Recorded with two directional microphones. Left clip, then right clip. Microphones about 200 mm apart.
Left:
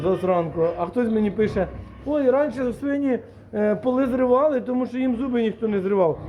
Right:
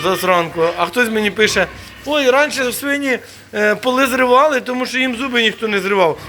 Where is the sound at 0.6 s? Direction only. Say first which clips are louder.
Right 6 dB; 30° right (ahead or behind).